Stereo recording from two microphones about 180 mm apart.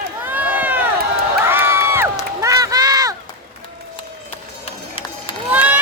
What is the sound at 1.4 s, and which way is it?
Crowd, 15° right (ahead or behind).